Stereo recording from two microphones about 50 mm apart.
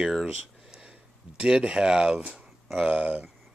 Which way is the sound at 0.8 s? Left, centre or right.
Centre.